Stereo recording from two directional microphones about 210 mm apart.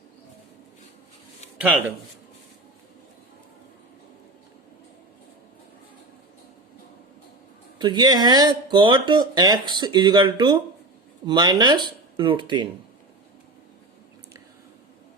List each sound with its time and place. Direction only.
1.5 s speech: 5° right (ahead or behind)
7.8 s speech: 20° right (ahead or behind)